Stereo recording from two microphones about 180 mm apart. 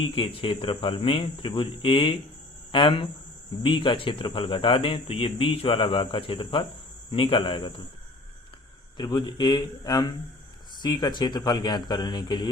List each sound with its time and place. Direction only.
0.0 s speech: 30° left (ahead or behind)
9.0 s speech: 25° left (ahead or behind)